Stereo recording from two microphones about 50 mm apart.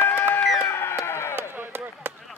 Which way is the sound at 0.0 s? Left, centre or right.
Left.